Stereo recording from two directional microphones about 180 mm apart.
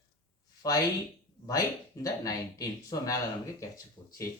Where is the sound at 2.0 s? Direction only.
20° left (ahead or behind).